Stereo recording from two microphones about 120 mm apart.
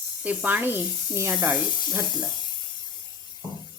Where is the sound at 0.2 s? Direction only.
15° right (ahead or behind).